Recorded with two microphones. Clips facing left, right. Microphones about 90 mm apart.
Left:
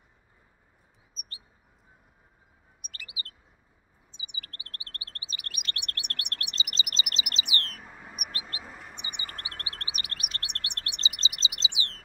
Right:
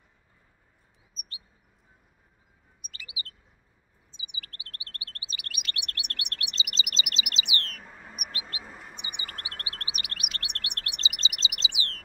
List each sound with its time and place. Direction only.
2.8 s chirp: 50° left (ahead or behind)
4.2 s chirp: 35° left (ahead or behind)
8.3 s mouse: 40° left (ahead or behind)
8.7 s chirp: centre (ahead or behind)
9.1 s chirp: 30° left (ahead or behind)